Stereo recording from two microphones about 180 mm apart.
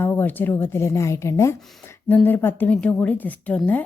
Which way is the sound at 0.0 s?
10° left (ahead or behind).